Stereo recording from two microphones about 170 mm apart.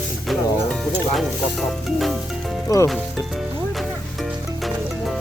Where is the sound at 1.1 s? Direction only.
Centre (ahead or behind).